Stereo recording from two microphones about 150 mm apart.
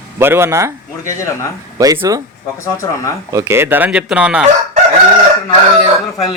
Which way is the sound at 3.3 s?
15° right (ahead or behind).